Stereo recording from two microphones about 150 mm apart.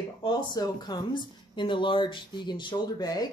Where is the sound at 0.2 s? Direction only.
30° left (ahead or behind).